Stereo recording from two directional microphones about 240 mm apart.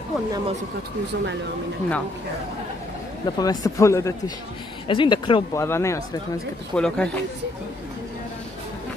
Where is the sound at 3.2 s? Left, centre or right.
Centre.